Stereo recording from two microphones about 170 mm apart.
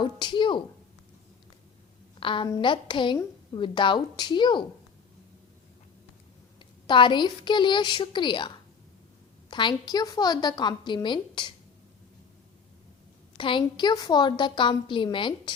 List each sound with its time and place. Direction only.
0.0 s a woman's voice: 30° left (ahead or behind)
2.2 s a woman's voice: 30° left (ahead or behind)
6.6 s a woman's voice: 30° left (ahead or behind)
13.3 s a woman's voice: 30° left (ahead or behind)